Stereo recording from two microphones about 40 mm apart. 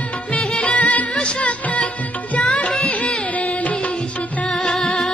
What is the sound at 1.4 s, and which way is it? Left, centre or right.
Music, left.